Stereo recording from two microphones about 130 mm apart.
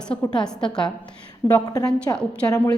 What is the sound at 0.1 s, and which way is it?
Speech, 45° left (ahead or behind).